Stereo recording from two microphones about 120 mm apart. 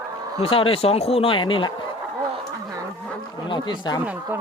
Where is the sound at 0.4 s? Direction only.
50° left (ahead or behind).